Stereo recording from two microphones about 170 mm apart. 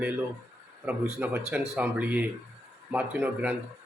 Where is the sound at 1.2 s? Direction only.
10° right (ahead or behind).